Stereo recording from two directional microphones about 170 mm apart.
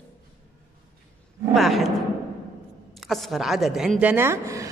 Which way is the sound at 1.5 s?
Centre (ahead or behind).